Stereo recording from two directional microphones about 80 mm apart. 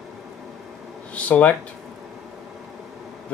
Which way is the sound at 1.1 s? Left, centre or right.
Centre.